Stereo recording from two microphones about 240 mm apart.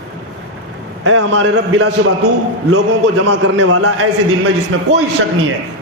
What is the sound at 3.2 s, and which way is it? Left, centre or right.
A man's voice, right.